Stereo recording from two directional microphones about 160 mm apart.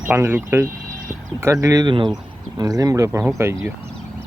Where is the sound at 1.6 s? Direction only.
25° right (ahead or behind).